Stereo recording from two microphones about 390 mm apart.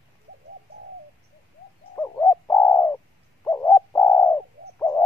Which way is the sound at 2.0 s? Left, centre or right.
Centre.